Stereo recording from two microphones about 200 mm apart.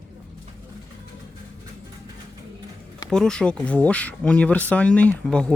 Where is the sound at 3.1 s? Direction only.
5° left (ahead or behind).